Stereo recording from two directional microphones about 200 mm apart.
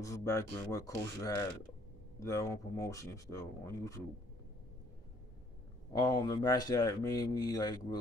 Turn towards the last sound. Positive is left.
turn(degrees=20)  # may be behind; listen again after turning